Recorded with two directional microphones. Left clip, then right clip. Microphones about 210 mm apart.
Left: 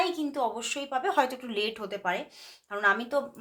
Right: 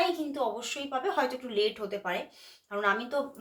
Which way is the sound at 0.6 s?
40° left (ahead or behind).